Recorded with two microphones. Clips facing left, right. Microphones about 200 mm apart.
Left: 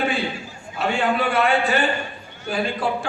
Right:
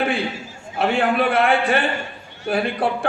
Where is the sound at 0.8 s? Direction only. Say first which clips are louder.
Right 3 dB; 55° right (ahead or behind).